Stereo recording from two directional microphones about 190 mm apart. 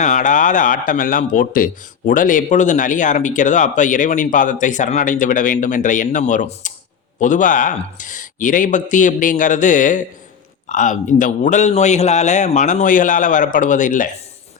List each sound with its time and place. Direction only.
0.0 s a man's voice: 40° left (ahead or behind)